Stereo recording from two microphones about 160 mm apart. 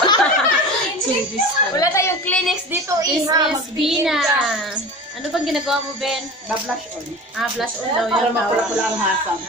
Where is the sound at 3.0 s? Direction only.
20° right (ahead or behind).